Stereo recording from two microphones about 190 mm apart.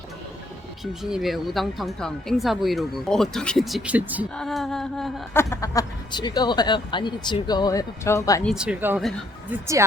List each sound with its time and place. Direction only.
1.1 s speech: centre (ahead or behind)
5.3 s speech: 15° left (ahead or behind)
8.4 s speech: 5° right (ahead or behind)